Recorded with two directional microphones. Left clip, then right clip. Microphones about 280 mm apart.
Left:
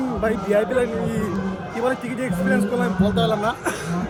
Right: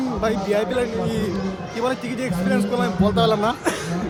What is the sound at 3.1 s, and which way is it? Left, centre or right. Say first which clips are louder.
Speech: right 4 dB; right.